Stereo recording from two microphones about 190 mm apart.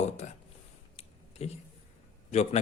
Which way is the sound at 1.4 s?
35° left (ahead or behind).